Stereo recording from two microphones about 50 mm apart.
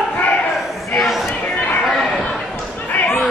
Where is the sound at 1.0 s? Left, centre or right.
Centre.